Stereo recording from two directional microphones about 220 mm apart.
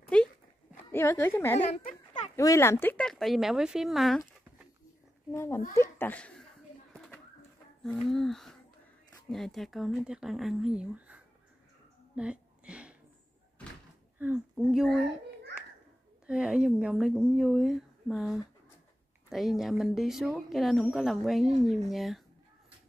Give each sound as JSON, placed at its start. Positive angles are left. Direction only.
{"t": 0.1, "sound": "dog", "side_deg": 5}
{"t": 0.9, "sound": "speech", "side_deg": 10}
{"t": 1.6, "sound": "a sound", "side_deg": 35}
{"t": 2.3, "sound": "speech", "side_deg": 15}
{"t": 5.3, "sound": "speech", "side_deg": 10}
{"t": 7.8, "sound": "speech", "side_deg": 0}
{"t": 12.2, "sound": "a sound", "side_deg": -5}
{"t": 14.1, "sound": "speech", "side_deg": -5}
{"t": 16.3, "sound": "speech", "side_deg": -5}